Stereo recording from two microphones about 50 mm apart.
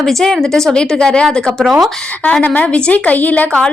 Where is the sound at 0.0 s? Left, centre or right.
Centre.